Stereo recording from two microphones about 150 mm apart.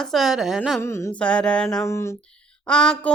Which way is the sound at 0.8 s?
15° left (ahead or behind).